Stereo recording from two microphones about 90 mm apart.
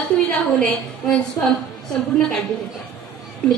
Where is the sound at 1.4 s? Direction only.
35° left (ahead or behind).